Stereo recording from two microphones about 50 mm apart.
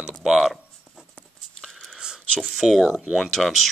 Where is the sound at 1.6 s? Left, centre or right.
Centre.